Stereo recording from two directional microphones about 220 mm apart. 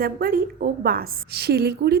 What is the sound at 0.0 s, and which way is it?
A woman's voice, 45° right (ahead or behind).